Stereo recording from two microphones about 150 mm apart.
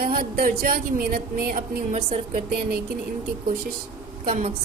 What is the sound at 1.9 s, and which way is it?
Speech, 40° right (ahead or behind).